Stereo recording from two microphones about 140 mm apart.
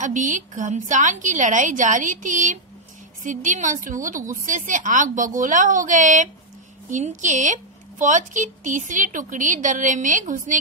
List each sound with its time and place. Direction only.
0.0 s a woman's voice: 65° right (ahead or behind)